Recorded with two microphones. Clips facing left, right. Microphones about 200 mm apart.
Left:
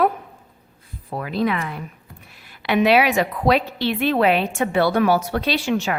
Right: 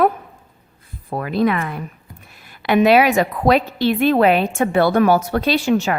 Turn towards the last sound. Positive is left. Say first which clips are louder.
# right 4 dB
turn(degrees=-45)  # may be behind; listen again after turning